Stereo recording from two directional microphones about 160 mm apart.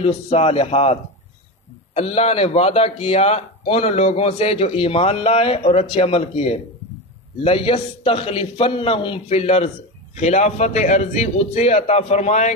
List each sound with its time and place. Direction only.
0.0 s a man's voice: 40° left (ahead or behind)
2.0 s a man's voice: 40° left (ahead or behind)